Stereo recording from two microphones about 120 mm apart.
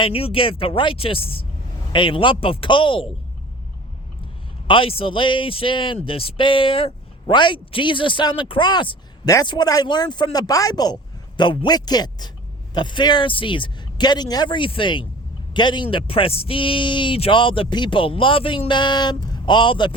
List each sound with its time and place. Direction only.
0.0 s a man's voice: 50° left (ahead or behind)
4.7 s a man's voice: 50° left (ahead or behind)